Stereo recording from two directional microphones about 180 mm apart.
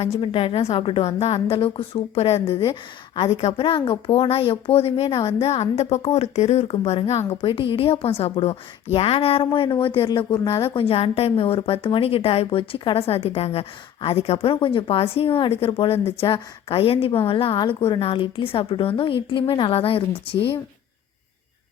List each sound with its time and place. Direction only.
0.0 s a woman's voice: 30° left (ahead or behind)